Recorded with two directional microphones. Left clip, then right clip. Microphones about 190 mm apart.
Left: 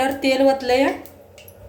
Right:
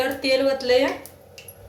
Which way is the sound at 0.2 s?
70° left (ahead or behind).